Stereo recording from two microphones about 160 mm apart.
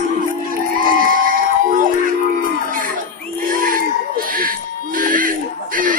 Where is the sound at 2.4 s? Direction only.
60° right (ahead or behind).